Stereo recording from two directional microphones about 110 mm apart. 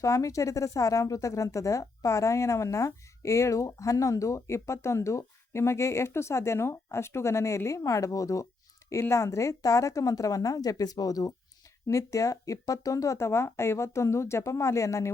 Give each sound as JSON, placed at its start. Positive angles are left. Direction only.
{"t": 0.0, "sound": "speech", "side_deg": 30}